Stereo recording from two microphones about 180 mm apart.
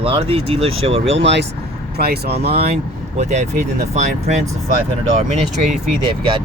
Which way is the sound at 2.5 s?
35° right (ahead or behind).